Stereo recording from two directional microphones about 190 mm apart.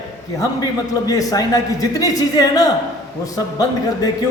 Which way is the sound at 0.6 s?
20° left (ahead or behind).